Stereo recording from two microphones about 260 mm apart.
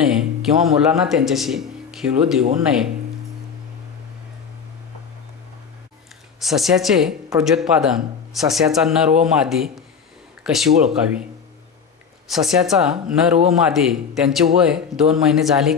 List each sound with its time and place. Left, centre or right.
0.1 s a man's voice: centre
6.4 s a man's voice: centre
12.3 s a man's voice: centre